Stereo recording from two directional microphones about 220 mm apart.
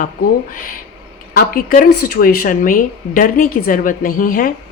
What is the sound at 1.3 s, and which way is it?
Speech, 40° left (ahead or behind).